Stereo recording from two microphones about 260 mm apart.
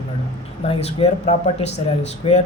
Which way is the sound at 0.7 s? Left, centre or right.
Left.